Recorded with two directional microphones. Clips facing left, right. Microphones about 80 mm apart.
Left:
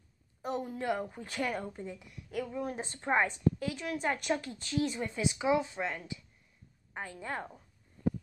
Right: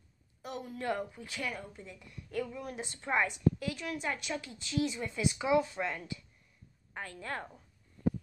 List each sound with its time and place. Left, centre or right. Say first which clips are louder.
0.4 s a sound: left 5 dB; left
1.0 s a woman's voice: left 4 dB; left
2.0 s a woman's voice: right 5 dB; centre
2.5 s a woman's voice: left 4 dB; left
5.2 s a woman's voice: right 1 dB; left